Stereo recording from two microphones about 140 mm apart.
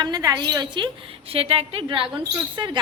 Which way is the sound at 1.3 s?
45° right (ahead or behind).